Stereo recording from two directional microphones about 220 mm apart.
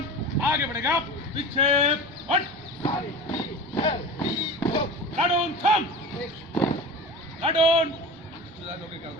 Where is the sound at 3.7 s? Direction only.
20° left (ahead or behind).